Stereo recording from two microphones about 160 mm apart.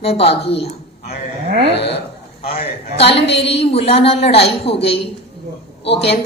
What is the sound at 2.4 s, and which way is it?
Speech, 35° left (ahead or behind).